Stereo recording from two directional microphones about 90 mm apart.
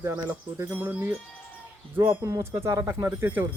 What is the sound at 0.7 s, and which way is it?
Speech, 15° right (ahead or behind).